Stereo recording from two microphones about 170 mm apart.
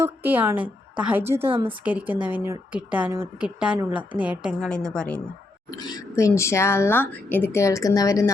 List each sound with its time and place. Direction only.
0.0 s a woman's voice: 10° right (ahead or behind)
1.5 s speech: 30° right (ahead or behind)
1.8 s a woman's voice: 10° right (ahead or behind)
5.7 s speech: 25° left (ahead or behind)